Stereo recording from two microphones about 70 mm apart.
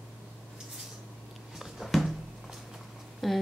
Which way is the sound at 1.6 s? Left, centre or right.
Centre.